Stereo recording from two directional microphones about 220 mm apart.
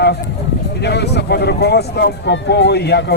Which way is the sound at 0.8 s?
50° left (ahead or behind).